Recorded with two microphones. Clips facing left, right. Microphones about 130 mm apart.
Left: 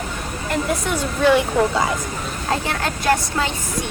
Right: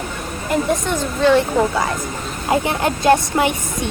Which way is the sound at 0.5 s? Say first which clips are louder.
Right 3 dB; 5° left (ahead or behind).